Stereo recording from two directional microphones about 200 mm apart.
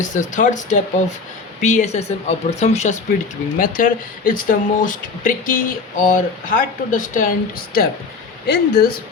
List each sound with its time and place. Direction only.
0.0 s speech: 40° left (ahead or behind)